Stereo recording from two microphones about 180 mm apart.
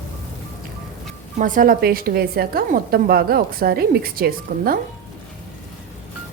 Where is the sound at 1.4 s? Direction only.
50° right (ahead or behind).